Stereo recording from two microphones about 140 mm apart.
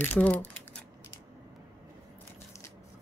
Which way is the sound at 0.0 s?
10° left (ahead or behind).